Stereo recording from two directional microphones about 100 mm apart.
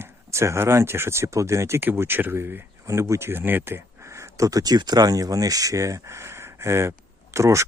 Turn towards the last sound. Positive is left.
turn(degrees=-30)  # may be behind; listen again after turning